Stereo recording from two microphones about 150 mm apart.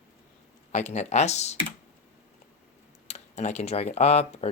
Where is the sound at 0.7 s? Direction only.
50° left (ahead or behind).